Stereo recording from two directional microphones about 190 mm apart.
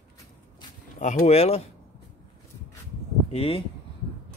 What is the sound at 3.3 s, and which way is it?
Speech, 30° left (ahead or behind).